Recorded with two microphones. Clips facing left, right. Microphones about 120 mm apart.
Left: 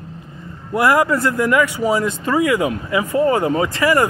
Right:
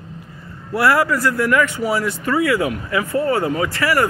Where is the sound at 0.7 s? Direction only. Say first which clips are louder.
Left 1 dB; 20° left (ahead or behind).